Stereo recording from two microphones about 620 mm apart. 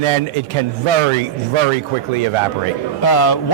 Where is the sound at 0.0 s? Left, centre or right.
Right.